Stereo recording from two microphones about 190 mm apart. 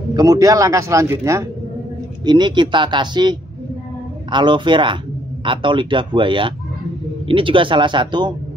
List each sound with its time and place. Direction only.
0.1 s a man's voice: 20° right (ahead or behind)